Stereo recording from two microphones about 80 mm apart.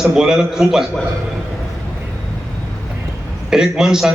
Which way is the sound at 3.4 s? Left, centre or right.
Centre.